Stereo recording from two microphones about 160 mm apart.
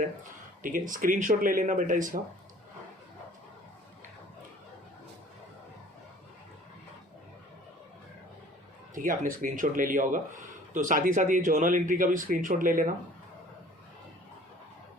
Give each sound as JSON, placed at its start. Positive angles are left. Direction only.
{"t": 0.6, "sound": "speech", "side_deg": -55}
{"t": 9.0, "sound": "speech", "side_deg": -60}